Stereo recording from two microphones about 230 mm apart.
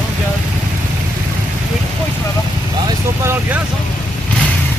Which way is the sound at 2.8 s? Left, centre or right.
Centre.